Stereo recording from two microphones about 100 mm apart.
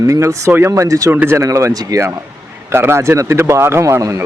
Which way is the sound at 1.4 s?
30° right (ahead or behind).